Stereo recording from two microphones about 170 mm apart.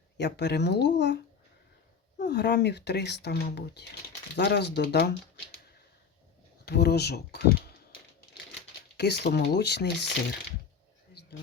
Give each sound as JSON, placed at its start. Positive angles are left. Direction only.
{"t": 0.2, "sound": "speech", "side_deg": 85}
{"t": 2.2, "sound": "speech", "side_deg": 85}
{"t": 6.7, "sound": "speech", "side_deg": 75}
{"t": 9.0, "sound": "speech", "side_deg": 80}